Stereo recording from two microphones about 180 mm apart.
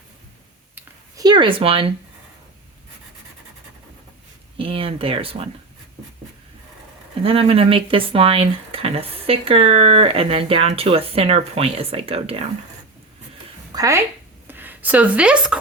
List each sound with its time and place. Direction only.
0.8 s a sound: 20° right (ahead or behind)
4.5 s speech: 30° right (ahead or behind)
7.2 s speech: 30° right (ahead or behind)
13.7 s a woman's voice: 20° right (ahead or behind)